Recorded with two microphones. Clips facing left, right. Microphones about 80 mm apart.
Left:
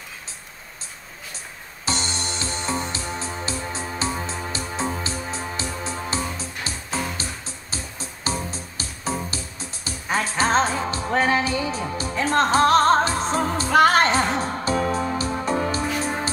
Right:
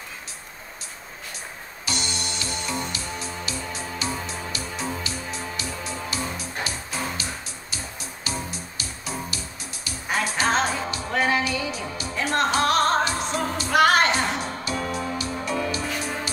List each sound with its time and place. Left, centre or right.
1.9 s music: left